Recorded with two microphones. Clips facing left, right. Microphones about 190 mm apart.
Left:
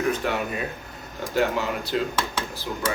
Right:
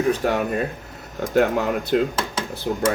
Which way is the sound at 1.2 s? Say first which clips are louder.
Right 5 dB; 55° right (ahead or behind).